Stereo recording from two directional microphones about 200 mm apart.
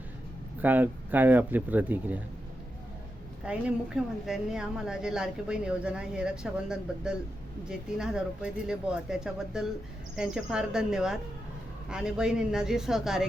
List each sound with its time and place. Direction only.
0.6 s speech: 10° right (ahead or behind)
3.4 s a woman's voice: 5° right (ahead or behind)